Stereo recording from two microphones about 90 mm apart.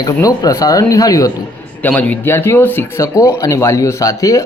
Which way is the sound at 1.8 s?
20° left (ahead or behind).